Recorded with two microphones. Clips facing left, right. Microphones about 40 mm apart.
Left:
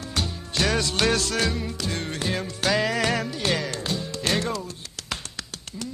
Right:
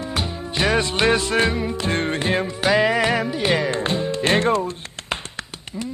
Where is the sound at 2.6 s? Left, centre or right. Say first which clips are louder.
Right 5 dB; right.